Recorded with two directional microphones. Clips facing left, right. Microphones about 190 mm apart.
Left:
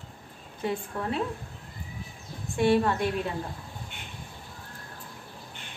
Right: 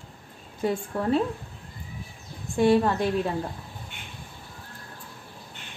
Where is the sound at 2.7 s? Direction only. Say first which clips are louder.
Right 2 dB; 30° right (ahead or behind).